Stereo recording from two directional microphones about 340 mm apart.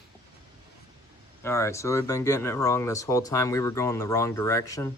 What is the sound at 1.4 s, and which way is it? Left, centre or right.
Speech, centre.